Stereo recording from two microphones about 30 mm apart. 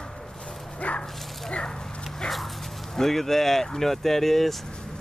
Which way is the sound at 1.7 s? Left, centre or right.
Centre.